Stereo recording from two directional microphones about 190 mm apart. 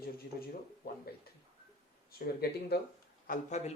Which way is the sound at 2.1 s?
55° left (ahead or behind).